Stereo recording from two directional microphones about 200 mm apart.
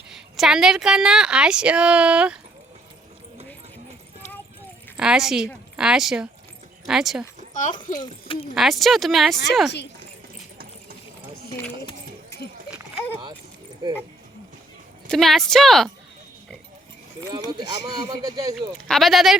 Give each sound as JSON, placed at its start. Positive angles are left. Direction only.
{"t": 0.1, "sound": "a woman's voice", "side_deg": 0}
{"t": 4.9, "sound": "a woman's voice", "side_deg": -5}
{"t": 7.5, "sound": "speech", "side_deg": 40}
{"t": 7.9, "sound": "a child's voice", "side_deg": 25}
{"t": 8.5, "sound": "a woman's voice", "side_deg": 0}
{"t": 15.1, "sound": "a woman's voice", "side_deg": 0}
{"t": 17.8, "sound": "speech", "side_deg": -20}
{"t": 18.9, "sound": "a woman's voice", "side_deg": 0}